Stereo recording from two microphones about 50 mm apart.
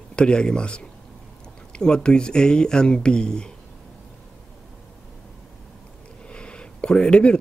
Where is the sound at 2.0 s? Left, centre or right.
Centre.